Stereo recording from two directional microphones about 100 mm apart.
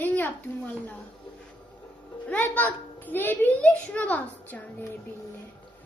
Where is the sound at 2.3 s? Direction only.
15° left (ahead or behind).